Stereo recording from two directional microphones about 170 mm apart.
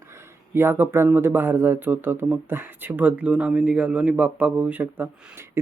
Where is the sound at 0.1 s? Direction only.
15° right (ahead or behind).